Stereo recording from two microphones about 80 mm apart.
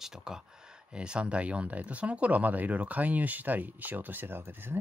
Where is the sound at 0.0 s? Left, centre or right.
Centre.